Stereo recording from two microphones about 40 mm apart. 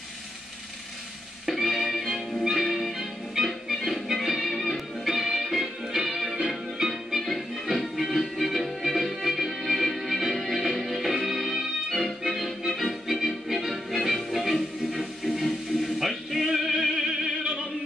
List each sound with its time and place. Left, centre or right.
1.4 s music: centre
14.9 s music: right
15.4 s music: centre